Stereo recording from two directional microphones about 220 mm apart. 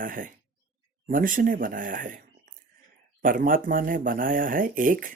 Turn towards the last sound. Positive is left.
turn(degrees=-40)  # may be behind; listen again after turning